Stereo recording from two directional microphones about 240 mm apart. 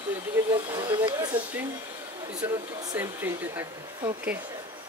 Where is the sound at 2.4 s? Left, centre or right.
Centre.